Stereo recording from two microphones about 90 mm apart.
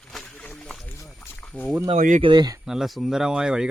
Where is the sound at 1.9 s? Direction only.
75° right (ahead or behind).